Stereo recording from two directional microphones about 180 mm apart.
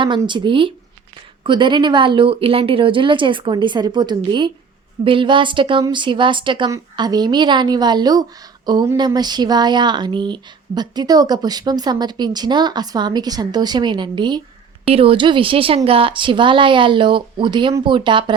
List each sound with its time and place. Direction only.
0.0 s speech: 25° right (ahead or behind)